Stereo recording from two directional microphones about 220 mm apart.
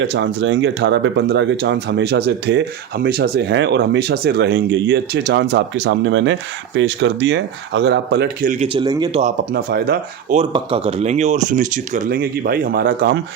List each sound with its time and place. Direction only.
0.0 s speech: 55° right (ahead or behind)
8.6 s speech: 20° right (ahead or behind)
9.6 s speech: 45° right (ahead or behind)
10.3 s speech: 25° right (ahead or behind); by 13.1 s 45° right (ahead or behind)